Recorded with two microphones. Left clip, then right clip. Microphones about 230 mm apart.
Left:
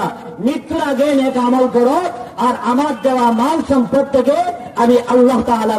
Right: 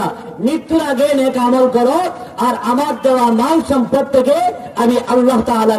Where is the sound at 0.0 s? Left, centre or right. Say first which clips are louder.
Right 1 dB; right.